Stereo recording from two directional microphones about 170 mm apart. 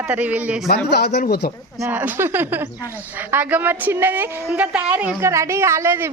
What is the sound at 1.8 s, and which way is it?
Speech, 10° right (ahead or behind).